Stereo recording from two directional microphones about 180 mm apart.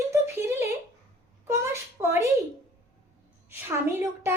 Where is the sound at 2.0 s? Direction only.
15° right (ahead or behind).